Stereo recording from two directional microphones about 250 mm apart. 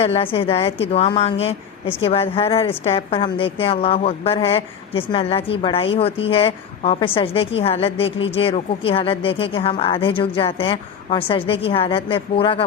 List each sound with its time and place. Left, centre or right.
0.0 s a woman's voice: left